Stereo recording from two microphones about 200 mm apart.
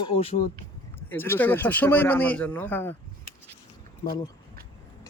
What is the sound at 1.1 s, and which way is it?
A man's voice, 10° left (ahead or behind).